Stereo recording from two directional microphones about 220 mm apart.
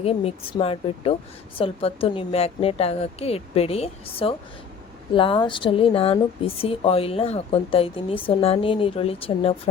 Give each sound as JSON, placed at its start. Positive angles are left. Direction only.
{"t": 0.0, "sound": "speech", "side_deg": 25}